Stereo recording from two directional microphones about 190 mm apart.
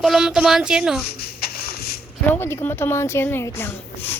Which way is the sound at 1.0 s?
55° left (ahead or behind).